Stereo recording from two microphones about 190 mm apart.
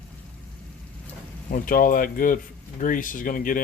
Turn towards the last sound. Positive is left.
turn(degrees=45)  # may be behind; listen again after turning